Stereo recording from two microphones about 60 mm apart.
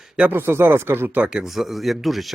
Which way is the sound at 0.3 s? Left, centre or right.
Right.